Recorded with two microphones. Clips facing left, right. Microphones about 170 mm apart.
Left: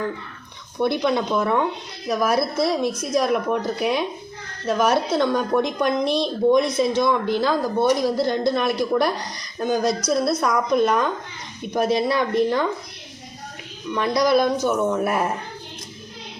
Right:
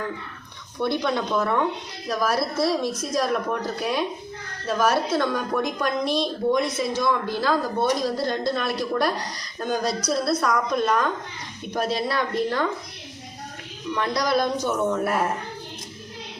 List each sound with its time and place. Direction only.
0.8 s a woman's voice: 15° left (ahead or behind)
13.9 s a woman's voice: 10° left (ahead or behind)